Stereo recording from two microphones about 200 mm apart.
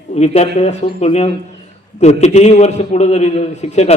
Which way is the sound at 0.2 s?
35° left (ahead or behind).